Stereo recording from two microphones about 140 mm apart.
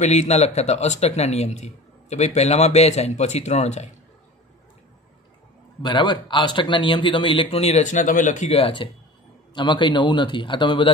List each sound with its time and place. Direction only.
0.0 s speech: 55° left (ahead or behind)
5.8 s a man's voice: 35° left (ahead or behind); by 8.5 s 65° left (ahead or behind)
8.5 s a man's voice: 40° left (ahead or behind)